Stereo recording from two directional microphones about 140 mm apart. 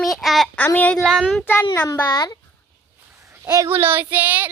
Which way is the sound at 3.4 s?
20° right (ahead or behind).